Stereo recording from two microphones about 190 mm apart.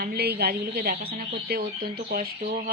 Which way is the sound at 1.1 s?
35° right (ahead or behind).